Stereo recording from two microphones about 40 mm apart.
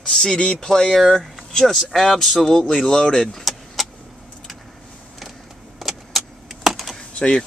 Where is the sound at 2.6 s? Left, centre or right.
Left.